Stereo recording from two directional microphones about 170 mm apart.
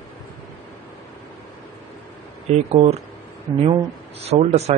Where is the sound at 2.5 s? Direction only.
35° right (ahead or behind).